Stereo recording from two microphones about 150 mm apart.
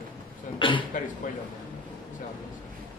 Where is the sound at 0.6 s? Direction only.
35° left (ahead or behind).